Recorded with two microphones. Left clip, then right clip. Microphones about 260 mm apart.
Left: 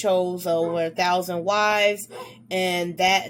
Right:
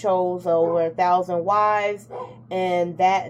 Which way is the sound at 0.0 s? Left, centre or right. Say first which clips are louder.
Right 1 dB; left.